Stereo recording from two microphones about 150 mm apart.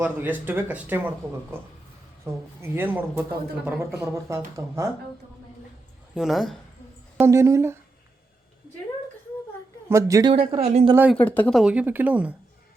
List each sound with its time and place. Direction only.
0.0 s speech: 10° right (ahead or behind)
6.1 s speech: centre (ahead or behind)
7.3 s speech: 20° right (ahead or behind)
9.9 s speech: 20° right (ahead or behind)
10.3 s speech: 40° right (ahead or behind)
11.2 s speech: 10° left (ahead or behind)
11.6 s speech: 10° right (ahead or behind)